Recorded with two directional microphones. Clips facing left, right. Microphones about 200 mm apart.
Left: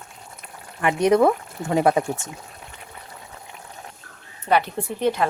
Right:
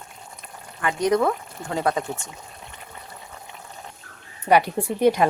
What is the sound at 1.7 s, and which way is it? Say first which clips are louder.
Speech: left 5 dB; 25° left (ahead or behind).